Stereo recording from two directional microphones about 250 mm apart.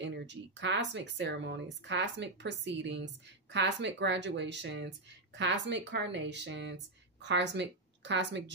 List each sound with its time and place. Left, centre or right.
0.0 s speech: right